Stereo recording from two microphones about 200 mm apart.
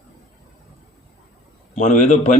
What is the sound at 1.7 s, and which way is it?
Speech, 40° left (ahead or behind).